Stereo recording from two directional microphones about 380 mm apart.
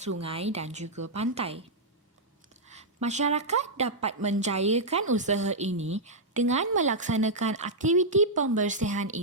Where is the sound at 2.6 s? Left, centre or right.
Centre.